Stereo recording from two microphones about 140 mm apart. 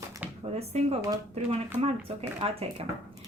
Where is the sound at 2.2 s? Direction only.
45° right (ahead or behind).